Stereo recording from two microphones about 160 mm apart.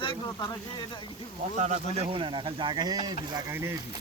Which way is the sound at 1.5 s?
45° right (ahead or behind).